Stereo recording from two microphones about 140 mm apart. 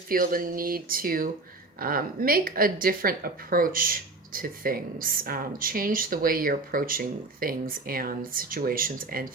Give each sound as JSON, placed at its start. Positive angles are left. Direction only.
{"t": 0.1, "sound": "speech", "side_deg": -90}